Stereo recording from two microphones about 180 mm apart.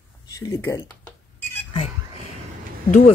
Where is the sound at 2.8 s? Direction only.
40° left (ahead or behind).